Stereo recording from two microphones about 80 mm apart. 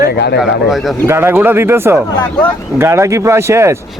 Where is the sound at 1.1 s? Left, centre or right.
Right.